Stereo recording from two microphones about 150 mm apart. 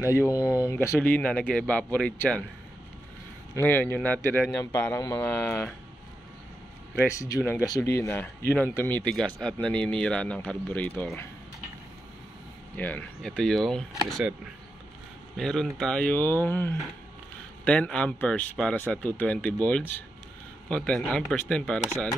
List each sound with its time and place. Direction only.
0.0 s speech: 20° left (ahead or behind)
0.9 s speech: 10° left (ahead or behind)
3.5 s speech: 15° left (ahead or behind)
7.1 s speech: 20° left (ahead or behind)
12.7 s speech: 10° left (ahead or behind)
15.3 s speech: centre (ahead or behind)